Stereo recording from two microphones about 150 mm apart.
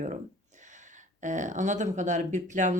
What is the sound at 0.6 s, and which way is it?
Speech, 55° right (ahead or behind).